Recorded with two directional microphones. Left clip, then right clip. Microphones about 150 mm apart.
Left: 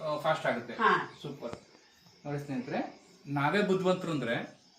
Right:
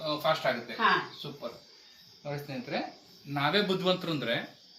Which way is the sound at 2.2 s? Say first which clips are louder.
Even; 10° left (ahead or behind).